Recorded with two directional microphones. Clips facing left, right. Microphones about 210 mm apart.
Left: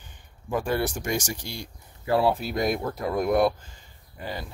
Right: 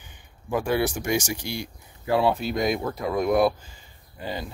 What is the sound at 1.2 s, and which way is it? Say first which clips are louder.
Speech: right 4 dB; 70° right (ahead or behind).